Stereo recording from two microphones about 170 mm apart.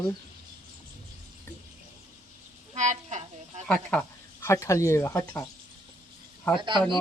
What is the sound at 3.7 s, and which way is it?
Speech, 5° left (ahead or behind).